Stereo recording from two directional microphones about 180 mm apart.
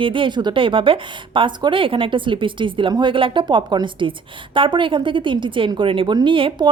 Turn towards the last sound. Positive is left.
turn(degrees=-30)  # may be behind; listen again after turning